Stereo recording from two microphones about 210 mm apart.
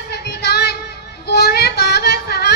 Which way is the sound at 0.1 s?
50° left (ahead or behind).